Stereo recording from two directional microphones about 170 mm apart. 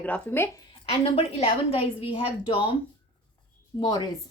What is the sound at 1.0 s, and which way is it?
A woman's voice, 35° left (ahead or behind).